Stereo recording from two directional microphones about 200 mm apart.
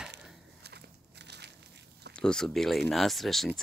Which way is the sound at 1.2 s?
55° right (ahead or behind).